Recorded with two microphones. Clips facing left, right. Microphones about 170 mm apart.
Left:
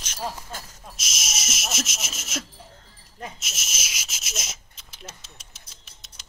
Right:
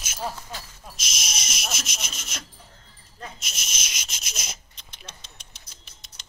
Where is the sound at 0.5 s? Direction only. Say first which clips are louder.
Even; 45° left (ahead or behind).